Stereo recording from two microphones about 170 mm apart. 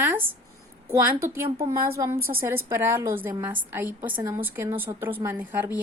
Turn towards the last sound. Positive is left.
turn(degrees=-15)  # may be behind; listen again after turning